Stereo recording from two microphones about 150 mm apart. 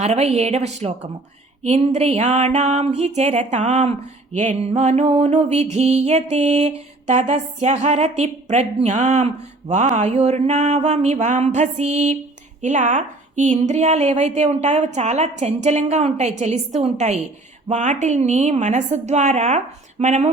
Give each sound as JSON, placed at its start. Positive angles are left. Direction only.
{"t": 0.0, "sound": "music", "side_deg": -45}